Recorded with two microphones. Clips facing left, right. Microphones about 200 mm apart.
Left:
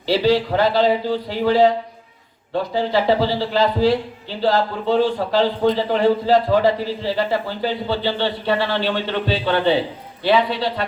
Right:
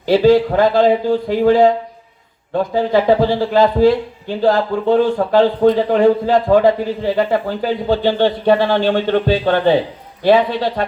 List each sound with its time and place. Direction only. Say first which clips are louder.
0.0 s a man's voice: right 6 dB; 50° right (ahead or behind)